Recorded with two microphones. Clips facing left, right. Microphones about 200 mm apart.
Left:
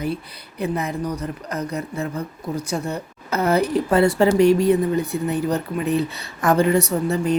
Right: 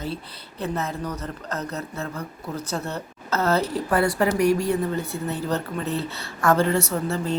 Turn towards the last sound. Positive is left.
turn(degrees=15)  # may be behind; listen again after turning